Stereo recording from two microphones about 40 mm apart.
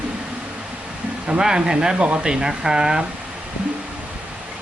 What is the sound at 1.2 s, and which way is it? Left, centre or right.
Speech, centre.